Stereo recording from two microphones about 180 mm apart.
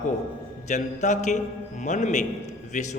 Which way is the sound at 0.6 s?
40° left (ahead or behind).